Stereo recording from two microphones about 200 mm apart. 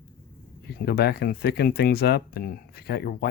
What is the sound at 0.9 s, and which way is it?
Speech, 55° left (ahead or behind).